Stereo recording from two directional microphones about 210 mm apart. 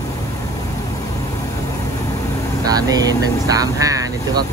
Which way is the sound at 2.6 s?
20° right (ahead or behind).